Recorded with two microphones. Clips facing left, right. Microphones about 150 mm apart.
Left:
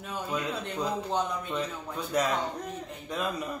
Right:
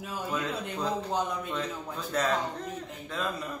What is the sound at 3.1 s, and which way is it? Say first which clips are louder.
Speech: left 2 dB; 15° left (ahead or behind).